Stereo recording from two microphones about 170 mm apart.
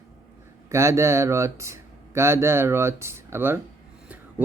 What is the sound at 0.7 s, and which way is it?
Speech, 15° right (ahead or behind).